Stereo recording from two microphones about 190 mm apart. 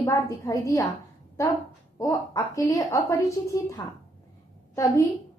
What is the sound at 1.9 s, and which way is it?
A woman's voice, 20° left (ahead or behind).